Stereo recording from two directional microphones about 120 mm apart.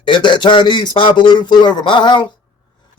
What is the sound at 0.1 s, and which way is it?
A man's voice, 40° left (ahead or behind).